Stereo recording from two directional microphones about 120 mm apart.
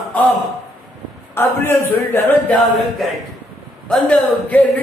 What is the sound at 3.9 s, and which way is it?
Speech, 10° left (ahead or behind).